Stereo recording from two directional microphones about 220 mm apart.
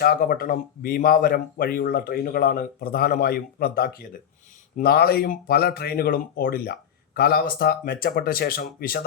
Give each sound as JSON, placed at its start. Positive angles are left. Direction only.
{"t": 0.0, "sound": "speech", "side_deg": 40}